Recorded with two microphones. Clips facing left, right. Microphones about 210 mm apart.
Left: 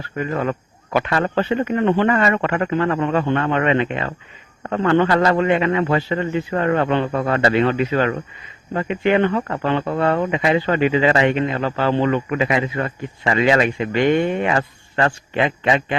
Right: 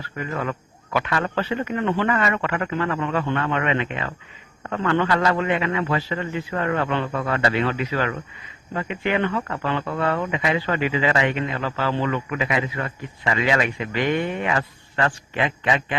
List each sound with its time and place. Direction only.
0.2 s speech: 30° left (ahead or behind)